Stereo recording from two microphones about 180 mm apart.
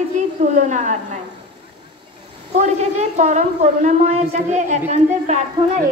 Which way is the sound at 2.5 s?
40° right (ahead or behind).